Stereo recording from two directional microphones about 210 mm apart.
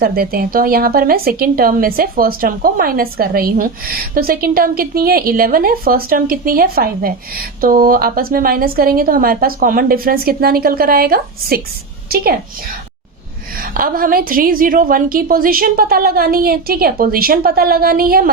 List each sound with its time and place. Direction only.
0.0 s a woman's voice: 45° right (ahead or behind)
13.7 s a woman's voice: 45° right (ahead or behind)